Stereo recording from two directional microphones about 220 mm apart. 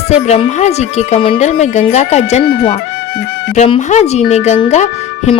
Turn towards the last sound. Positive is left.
turn(degrees=30)  # may be behind; listen again after turning